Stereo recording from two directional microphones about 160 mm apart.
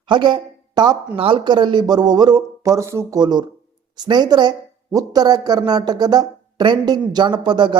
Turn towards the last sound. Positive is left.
turn(degrees=-30)  # may be behind; listen again after turning